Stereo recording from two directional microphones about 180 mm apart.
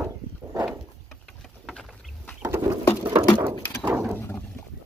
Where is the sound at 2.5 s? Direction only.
15° right (ahead or behind).